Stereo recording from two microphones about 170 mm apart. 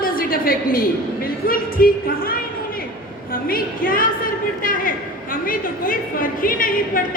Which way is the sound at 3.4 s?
55° left (ahead or behind).